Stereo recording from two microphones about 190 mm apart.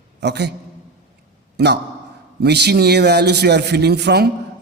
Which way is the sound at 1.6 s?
60° right (ahead or behind).